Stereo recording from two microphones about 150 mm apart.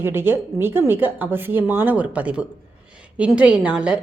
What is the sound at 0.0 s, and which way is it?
A woman's voice, 15° right (ahead or behind).